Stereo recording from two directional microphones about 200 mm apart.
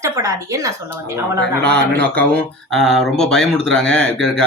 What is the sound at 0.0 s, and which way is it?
Speech, 15° right (ahead or behind).